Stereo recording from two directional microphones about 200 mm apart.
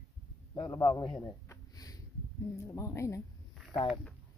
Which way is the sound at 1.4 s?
15° left (ahead or behind).